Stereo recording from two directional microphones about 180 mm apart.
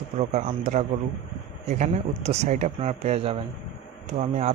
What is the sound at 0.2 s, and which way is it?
A man's voice, 40° right (ahead or behind).